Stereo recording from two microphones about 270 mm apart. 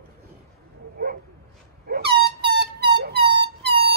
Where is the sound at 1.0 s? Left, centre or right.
Right.